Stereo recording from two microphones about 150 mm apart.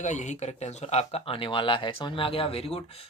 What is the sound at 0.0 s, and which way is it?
Speech, 55° left (ahead or behind).